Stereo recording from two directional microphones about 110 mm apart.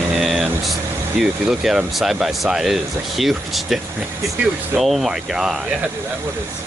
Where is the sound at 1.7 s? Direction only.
Centre (ahead or behind).